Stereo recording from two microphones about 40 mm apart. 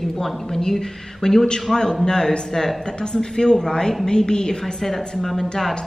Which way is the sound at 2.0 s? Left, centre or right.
Centre.